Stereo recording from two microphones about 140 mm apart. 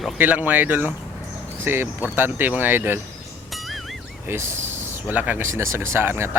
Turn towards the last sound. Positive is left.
turn(degrees=-15)  # may be behind; listen again after turning